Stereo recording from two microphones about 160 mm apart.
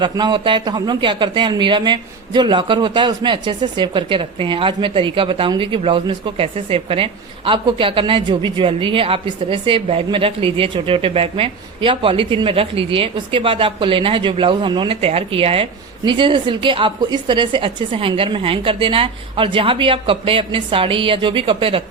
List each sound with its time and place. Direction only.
0.0 s a man's voice: 30° right (ahead or behind)